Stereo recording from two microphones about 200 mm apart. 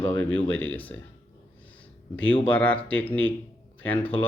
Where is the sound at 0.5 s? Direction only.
5° left (ahead or behind).